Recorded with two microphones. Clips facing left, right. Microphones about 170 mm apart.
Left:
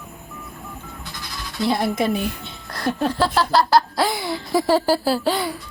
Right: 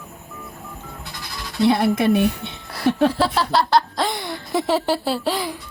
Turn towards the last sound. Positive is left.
turn(degrees=0)  # may be behind; listen again after turning